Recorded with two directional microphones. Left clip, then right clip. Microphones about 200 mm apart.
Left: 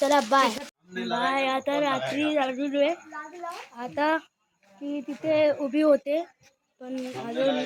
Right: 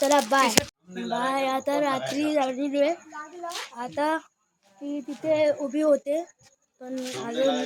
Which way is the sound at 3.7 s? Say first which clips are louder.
Left 1 dB; 15° left (ahead or behind).